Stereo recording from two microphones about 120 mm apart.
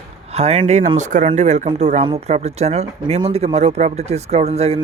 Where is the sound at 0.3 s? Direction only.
60° right (ahead or behind).